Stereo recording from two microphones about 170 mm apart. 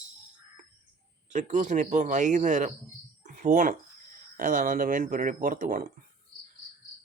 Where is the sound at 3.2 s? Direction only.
50° right (ahead or behind).